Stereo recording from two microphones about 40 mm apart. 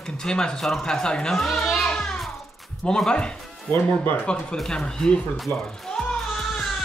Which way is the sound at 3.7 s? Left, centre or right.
Left.